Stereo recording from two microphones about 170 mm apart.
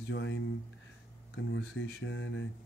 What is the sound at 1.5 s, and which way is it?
Speech, 90° left.